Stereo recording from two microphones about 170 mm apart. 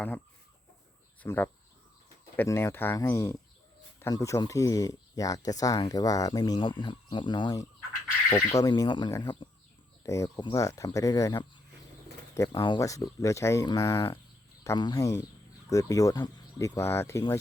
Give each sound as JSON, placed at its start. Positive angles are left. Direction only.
{"t": 1.2, "sound": "speech", "side_deg": 10}
{"t": 12.6, "sound": "speech", "side_deg": 25}